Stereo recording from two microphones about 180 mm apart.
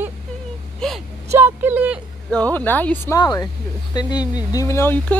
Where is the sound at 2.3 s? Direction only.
10° left (ahead or behind).